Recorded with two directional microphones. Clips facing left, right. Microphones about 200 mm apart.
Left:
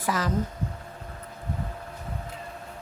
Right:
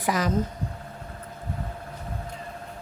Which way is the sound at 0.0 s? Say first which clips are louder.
Right 2 dB; 15° right (ahead or behind).